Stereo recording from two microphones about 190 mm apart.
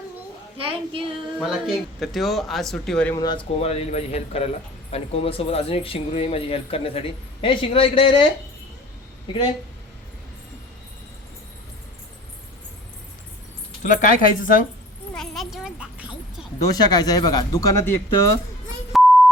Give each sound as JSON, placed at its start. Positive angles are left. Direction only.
{"t": 0.6, "sound": "a woman's voice", "side_deg": -30}
{"t": 1.4, "sound": "speech", "side_deg": -5}
{"t": 3.2, "sound": "speech", "side_deg": 25}
{"t": 13.8, "sound": "speech", "side_deg": 45}
{"t": 15.1, "sound": "a sound", "side_deg": 0}
{"t": 16.6, "sound": "speech", "side_deg": 20}
{"t": 18.9, "sound": "beep", "side_deg": 0}